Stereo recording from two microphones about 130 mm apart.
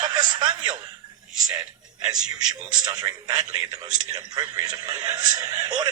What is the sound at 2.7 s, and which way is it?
Speech, 30° right (ahead or behind).